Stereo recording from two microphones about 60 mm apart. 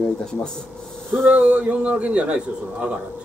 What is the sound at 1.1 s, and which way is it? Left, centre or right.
Speech, right.